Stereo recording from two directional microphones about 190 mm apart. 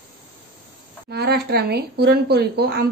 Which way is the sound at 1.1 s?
55° right (ahead or behind).